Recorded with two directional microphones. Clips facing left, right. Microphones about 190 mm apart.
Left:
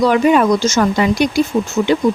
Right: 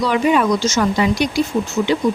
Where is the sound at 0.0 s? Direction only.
50° left (ahead or behind).